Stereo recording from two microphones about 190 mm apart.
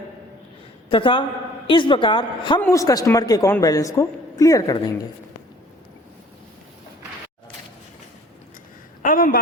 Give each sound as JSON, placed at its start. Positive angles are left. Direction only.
{"t": 0.9, "sound": "a woman's voice", "side_deg": 25}
{"t": 2.6, "sound": "a man's voice", "side_deg": 15}
{"t": 9.0, "sound": "a sound", "side_deg": 45}